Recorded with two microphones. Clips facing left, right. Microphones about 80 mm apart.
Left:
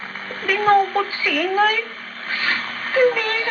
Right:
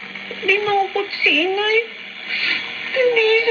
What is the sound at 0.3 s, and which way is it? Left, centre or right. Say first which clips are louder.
Speech: left 2 dB; left.